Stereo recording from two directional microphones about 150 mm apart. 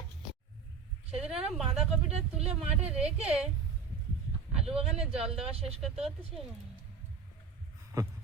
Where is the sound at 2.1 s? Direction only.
45° right (ahead or behind).